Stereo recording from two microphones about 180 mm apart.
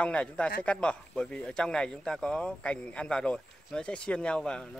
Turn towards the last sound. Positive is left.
turn(degrees=5)  # may be behind; listen again after turning